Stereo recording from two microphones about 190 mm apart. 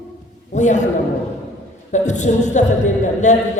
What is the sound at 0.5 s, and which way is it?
Speech, 40° left (ahead or behind).